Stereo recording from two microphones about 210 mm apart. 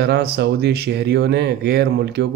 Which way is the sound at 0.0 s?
50° right (ahead or behind).